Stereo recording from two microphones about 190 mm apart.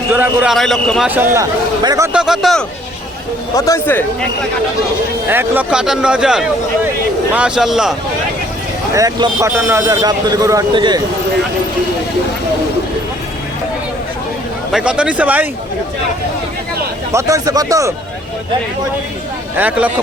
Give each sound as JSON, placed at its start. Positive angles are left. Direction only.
{"t": 0.1, "sound": "speech", "side_deg": -5}
{"t": 1.1, "sound": "a man's voice", "side_deg": -10}
{"t": 2.1, "sound": "speech", "side_deg": 0}
{"t": 3.5, "sound": "speech", "side_deg": 15}
{"t": 5.3, "sound": "speech", "side_deg": -10}
{"t": 8.9, "sound": "a man's voice", "side_deg": -20}
{"t": 14.7, "sound": "speech", "side_deg": -5}
{"t": 17.1, "sound": "a man's voice", "side_deg": -15}
{"t": 19.5, "sound": "a man's voice", "side_deg": -10}